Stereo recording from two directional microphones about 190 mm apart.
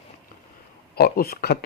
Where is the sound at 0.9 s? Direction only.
55° left (ahead or behind).